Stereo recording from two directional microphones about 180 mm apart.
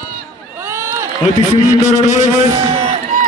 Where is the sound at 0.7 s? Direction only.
15° right (ahead or behind).